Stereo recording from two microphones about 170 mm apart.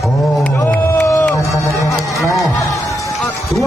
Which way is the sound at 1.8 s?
20° left (ahead or behind).